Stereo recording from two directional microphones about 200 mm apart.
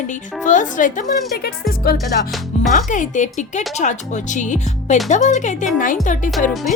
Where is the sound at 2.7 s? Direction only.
40° left (ahead or behind).